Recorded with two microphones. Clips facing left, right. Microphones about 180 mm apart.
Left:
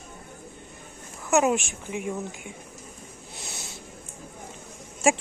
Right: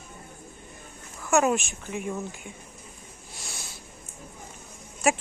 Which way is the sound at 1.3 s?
20° left (ahead or behind).